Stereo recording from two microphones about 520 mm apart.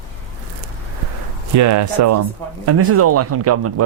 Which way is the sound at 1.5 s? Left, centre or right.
Right.